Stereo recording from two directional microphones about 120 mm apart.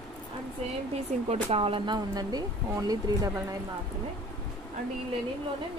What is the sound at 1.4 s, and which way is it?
Speech, 55° right (ahead or behind).